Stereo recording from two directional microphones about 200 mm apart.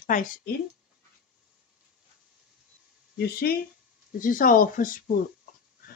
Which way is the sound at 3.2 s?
50° left (ahead or behind).